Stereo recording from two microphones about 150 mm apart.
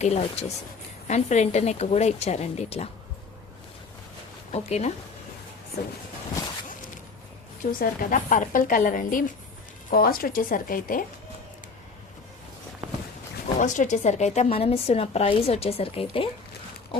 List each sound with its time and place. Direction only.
0.0 s speech: 45° left (ahead or behind)
4.5 s speech: 45° left (ahead or behind)
7.6 s a woman's voice: 65° left (ahead or behind)
9.9 s speech: 80° left
13.6 s speech: 55° left (ahead or behind); by 16.3 s 40° left (ahead or behind)